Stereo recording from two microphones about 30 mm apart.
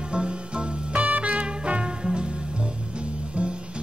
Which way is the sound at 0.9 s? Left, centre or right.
Right.